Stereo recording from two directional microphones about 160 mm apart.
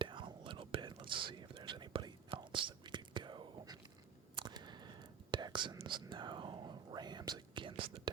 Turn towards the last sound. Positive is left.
turn(degrees=-30)  # may be behind; listen again after turning